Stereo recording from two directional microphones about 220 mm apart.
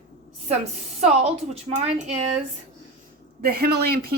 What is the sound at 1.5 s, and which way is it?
Speech, 30° right (ahead or behind).